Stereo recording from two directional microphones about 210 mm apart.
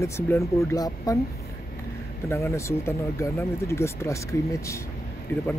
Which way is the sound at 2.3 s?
10° left (ahead or behind).